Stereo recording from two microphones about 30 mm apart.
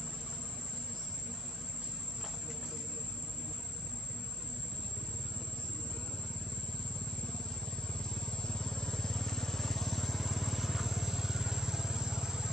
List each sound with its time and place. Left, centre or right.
8.3 s vehicle: left; by 12.4 s centre